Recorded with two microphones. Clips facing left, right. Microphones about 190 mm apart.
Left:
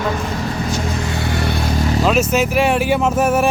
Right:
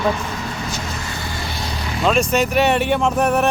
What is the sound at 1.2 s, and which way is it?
Vehicle, 70° left (ahead or behind).